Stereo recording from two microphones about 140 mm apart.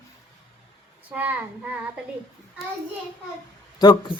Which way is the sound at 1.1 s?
10° right (ahead or behind).